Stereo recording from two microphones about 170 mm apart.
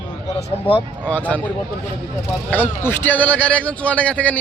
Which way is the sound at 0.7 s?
30° left (ahead or behind).